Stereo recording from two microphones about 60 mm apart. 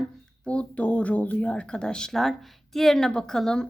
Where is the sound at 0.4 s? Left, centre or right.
Left.